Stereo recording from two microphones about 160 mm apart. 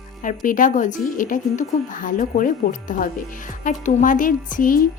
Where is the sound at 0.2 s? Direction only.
55° left (ahead or behind).